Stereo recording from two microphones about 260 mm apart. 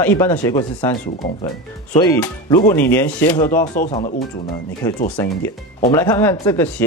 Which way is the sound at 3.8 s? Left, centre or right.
Left.